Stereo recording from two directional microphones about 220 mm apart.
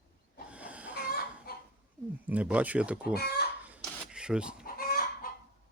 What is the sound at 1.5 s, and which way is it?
Dog, 45° left (ahead or behind).